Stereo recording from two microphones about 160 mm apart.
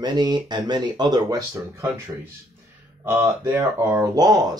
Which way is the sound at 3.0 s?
15° right (ahead or behind).